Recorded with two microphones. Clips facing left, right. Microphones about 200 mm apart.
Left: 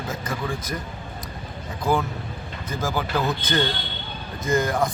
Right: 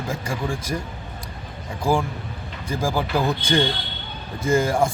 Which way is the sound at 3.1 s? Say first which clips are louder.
Right 3 dB; 10° right (ahead or behind).